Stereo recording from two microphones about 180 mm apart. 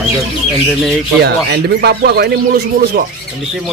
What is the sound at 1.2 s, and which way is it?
Speech, 65° right (ahead or behind).